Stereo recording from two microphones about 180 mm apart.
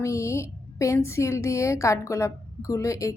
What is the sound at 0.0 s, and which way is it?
A woman's voice, 15° left (ahead or behind).